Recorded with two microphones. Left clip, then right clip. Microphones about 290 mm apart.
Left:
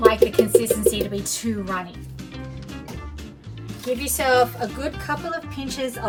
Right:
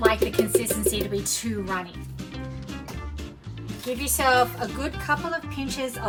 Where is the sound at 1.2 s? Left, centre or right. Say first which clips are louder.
Left 1 dB; centre.